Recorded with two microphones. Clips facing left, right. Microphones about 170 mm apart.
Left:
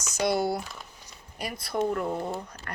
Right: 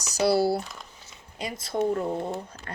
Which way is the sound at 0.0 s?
35° right (ahead or behind).